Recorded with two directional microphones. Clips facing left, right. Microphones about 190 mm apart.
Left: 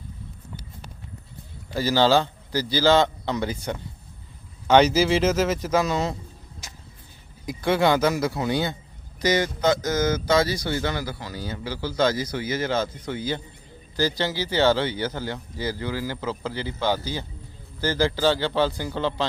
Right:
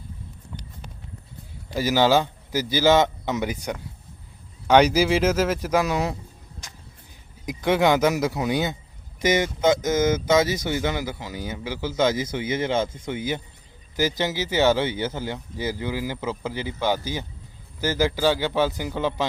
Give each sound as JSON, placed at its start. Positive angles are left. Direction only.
{"t": 1.7, "sound": "speech", "side_deg": -15}
{"t": 7.4, "sound": "speech", "side_deg": -15}